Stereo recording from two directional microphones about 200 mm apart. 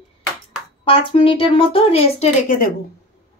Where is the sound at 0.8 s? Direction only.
25° left (ahead or behind).